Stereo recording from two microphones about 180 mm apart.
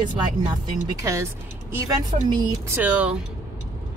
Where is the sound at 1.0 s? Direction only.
15° right (ahead or behind).